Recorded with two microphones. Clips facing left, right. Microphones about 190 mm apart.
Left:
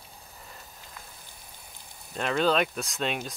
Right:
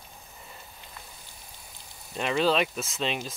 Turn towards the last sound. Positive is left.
turn(degrees=0)  # may be behind; listen again after turning